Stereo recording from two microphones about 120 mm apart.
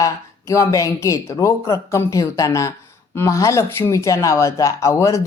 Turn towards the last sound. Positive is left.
turn(degrees=25)  # may be behind; listen again after turning